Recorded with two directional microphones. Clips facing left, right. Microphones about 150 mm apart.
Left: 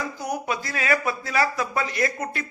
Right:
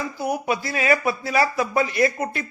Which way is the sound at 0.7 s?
15° right (ahead or behind).